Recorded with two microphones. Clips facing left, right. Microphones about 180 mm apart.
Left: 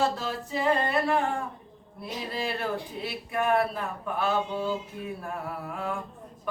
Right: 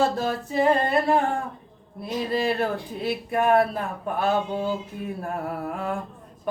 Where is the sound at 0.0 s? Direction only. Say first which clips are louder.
Right 5 dB; 45° right (ahead or behind).